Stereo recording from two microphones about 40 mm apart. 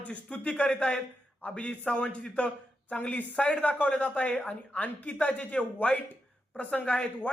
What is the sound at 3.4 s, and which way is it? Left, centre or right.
Speech, left.